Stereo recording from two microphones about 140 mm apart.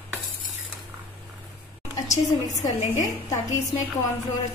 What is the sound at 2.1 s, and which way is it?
A woman's voice, 60° left (ahead or behind).